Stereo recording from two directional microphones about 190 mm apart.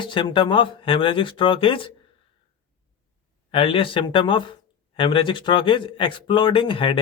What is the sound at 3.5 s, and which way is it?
Speech, 30° left (ahead or behind).